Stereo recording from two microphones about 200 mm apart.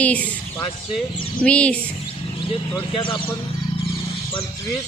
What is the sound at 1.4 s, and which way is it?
Speech, 5° left (ahead or behind).